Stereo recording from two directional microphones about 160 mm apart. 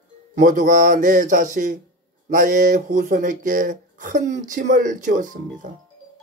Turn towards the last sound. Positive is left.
turn(degrees=-55)  # may be behind; listen again after turning